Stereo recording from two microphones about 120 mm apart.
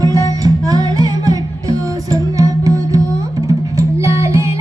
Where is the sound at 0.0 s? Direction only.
30° right (ahead or behind).